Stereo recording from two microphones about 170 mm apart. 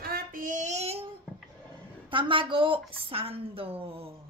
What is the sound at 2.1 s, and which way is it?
A woman's voice, 30° right (ahead or behind).